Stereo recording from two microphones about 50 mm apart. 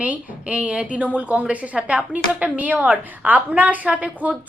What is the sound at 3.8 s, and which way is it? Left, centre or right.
Speech, right.